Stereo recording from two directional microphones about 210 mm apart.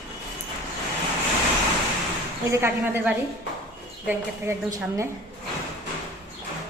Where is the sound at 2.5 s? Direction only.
10° right (ahead or behind).